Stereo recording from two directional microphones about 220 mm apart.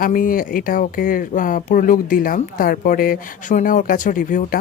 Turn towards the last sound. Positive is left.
turn(degrees=35)  # may be behind; listen again after turning